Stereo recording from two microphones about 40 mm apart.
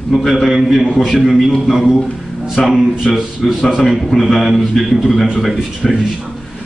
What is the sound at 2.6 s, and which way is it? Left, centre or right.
A man's voice, centre.